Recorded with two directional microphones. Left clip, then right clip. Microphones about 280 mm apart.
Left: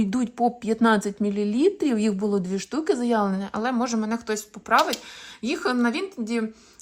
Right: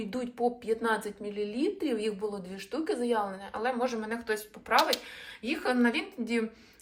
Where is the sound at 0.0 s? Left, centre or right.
Left.